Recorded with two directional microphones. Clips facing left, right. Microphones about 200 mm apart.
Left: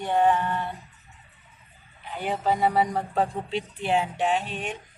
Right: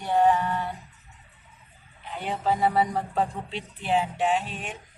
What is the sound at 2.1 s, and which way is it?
Speech, centre (ahead or behind).